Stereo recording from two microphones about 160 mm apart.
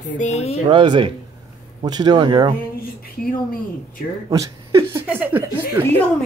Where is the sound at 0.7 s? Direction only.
30° right (ahead or behind).